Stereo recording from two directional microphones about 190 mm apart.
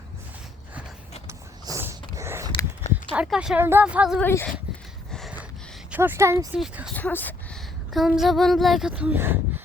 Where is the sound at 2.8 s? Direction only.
35° left (ahead or behind).